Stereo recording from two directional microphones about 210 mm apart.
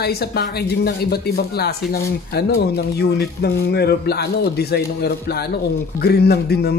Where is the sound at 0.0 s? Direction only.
50° left (ahead or behind).